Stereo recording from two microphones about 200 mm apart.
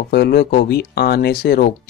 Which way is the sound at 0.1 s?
55° left (ahead or behind).